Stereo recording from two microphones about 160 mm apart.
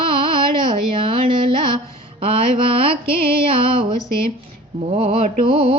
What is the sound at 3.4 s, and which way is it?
Female singing, 35° right (ahead or behind).